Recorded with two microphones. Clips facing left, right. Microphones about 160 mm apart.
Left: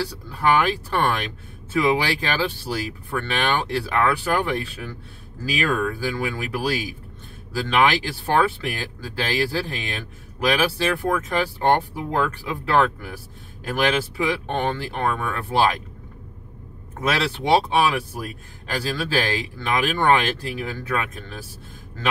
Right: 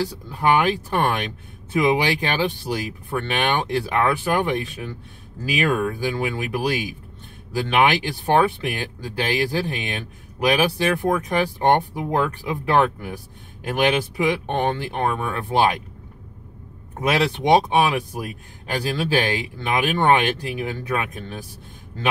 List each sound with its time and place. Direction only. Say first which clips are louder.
0.0 s speech: right 1 dB; 20° right (ahead or behind)
17.0 s speech: right 3 dB; 15° right (ahead or behind)